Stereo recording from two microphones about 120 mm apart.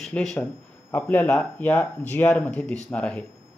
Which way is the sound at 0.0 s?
5° left (ahead or behind).